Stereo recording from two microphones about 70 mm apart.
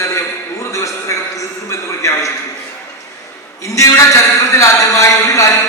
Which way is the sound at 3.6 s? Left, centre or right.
Left.